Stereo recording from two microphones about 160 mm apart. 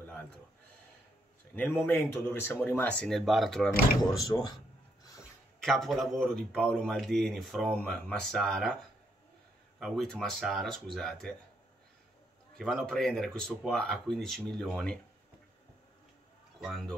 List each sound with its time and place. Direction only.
0.0 s a sound: 10° left (ahead or behind)
1.5 s speech: 10° left (ahead or behind)
4.2 s speech: 25° left (ahead or behind)
5.6 s a man's voice: centre (ahead or behind)
9.8 s a man's voice: centre (ahead or behind)
12.5 s a man's voice: centre (ahead or behind)
16.5 s a man's voice: centre (ahead or behind)